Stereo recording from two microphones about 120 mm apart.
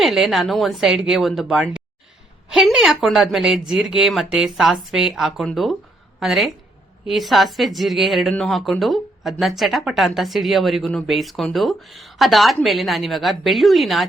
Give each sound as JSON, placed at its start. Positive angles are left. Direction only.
{"t": 0.0, "sound": "a woman's voice", "side_deg": 0}